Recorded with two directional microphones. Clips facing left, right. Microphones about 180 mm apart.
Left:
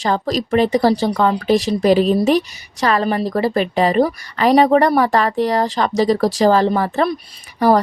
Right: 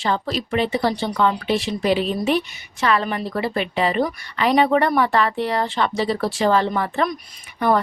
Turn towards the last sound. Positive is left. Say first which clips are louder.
# left 5 dB
turn(degrees=35)  # may be behind; listen again after turning